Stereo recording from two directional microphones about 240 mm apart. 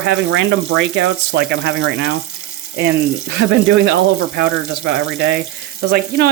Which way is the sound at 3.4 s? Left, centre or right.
Right.